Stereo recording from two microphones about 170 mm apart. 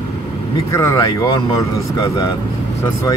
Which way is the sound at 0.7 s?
15° left (ahead or behind).